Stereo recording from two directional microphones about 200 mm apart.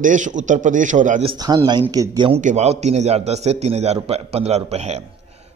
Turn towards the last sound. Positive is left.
turn(degrees=-35)  # may be behind; listen again after turning